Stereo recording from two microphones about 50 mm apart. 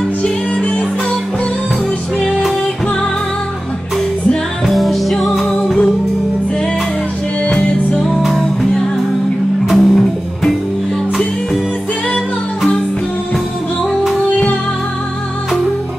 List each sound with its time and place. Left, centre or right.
0.2 s music: left
4.6 s music: centre
7.4 s music: left
8.4 s music: centre